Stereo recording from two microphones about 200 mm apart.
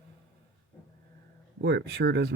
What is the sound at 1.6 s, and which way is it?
Speech, 55° right (ahead or behind).